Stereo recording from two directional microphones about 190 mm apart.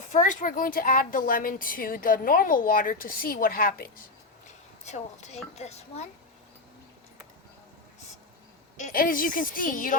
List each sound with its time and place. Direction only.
0.1 s speech: 40° left (ahead or behind)
4.9 s speech: 35° left (ahead or behind)
8.8 s speech: 45° left (ahead or behind)